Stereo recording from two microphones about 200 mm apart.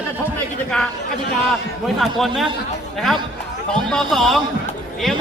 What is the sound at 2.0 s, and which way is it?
Speech, centre (ahead or behind).